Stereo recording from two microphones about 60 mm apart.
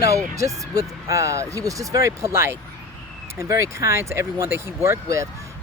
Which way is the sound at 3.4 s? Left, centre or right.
Right.